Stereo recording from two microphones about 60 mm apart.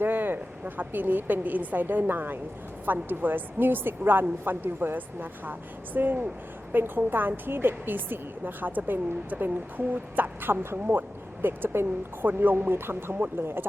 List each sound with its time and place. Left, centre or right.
0.0 s a woman's voice: right